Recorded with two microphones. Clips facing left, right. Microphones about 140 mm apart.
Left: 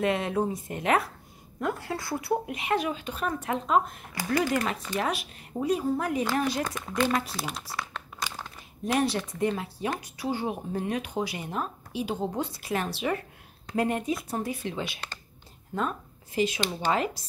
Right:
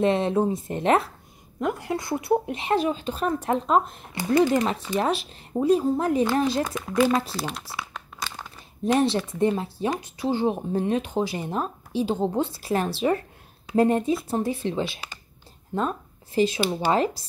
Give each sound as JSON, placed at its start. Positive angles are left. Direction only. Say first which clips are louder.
{"t": 0.0, "sound": "speech", "louder": "right 5 dB", "side_deg": -30}
{"t": 1.6, "sound": "speech", "louder": "right 4 dB", "side_deg": -20}
{"t": 6.6, "sound": "a woman's voice", "louder": "right 6 dB", "side_deg": -5}
{"t": 8.8, "sound": "speech", "louder": "right 5 dB", "side_deg": -30}
{"t": 16.3, "sound": "speech", "louder": "right 5 dB", "side_deg": -30}